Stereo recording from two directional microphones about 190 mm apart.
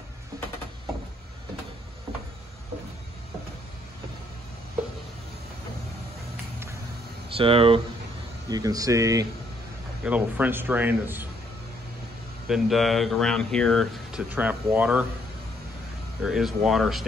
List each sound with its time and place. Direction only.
7.3 s a man's voice: 30° right (ahead or behind); by 11.2 s 10° right (ahead or behind)
12.4 s speech: centre (ahead or behind)
14.3 s a man's voice: 10° right (ahead or behind)
16.2 s speech: 5° right (ahead or behind)